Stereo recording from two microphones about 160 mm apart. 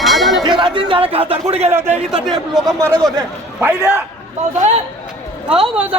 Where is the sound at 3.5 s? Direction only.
10° right (ahead or behind).